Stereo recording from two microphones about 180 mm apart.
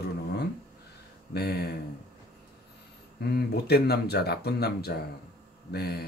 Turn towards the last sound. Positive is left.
turn(degrees=60)  # may be behind; listen again after turning